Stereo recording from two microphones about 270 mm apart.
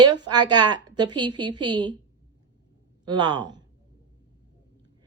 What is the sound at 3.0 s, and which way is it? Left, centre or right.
Speech, centre.